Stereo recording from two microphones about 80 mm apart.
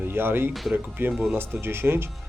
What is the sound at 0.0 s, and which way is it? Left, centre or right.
Speech, right.